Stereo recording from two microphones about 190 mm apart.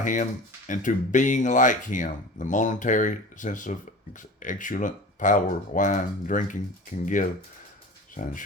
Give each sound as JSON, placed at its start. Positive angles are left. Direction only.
{"t": 0.0, "sound": "speech", "side_deg": 40}